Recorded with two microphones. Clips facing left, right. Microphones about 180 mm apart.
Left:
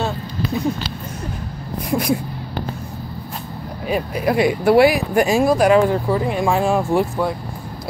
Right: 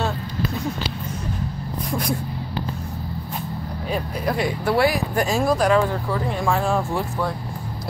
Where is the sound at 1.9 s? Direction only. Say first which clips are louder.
Left 6 dB; 5° left (ahead or behind).